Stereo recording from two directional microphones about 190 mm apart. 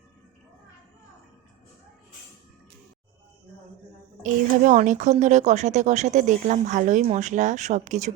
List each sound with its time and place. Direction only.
4.2 s speech: 40° right (ahead or behind)